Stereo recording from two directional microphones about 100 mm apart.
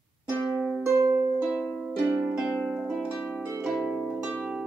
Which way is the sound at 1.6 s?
5° right (ahead or behind).